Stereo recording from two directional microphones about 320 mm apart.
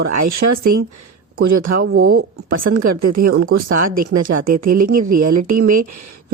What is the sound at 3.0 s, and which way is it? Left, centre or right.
Speech, right.